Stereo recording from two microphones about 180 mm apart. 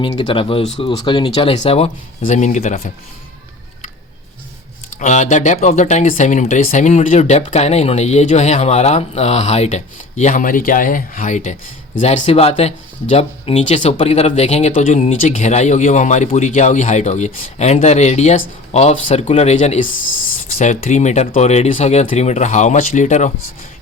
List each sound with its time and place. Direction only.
0.2 s speech: 30° left (ahead or behind)
4.9 s speech: 40° left (ahead or behind)